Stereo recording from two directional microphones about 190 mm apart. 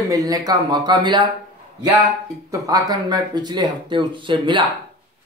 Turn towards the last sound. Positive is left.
turn(degrees=-25)  # may be behind; listen again after turning